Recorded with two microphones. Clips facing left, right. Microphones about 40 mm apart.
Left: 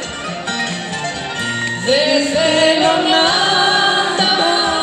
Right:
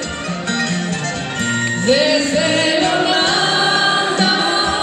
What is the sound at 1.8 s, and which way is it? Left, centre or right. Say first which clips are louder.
Music: even; left.